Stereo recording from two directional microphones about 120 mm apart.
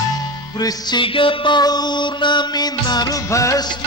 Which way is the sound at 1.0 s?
45° left (ahead or behind).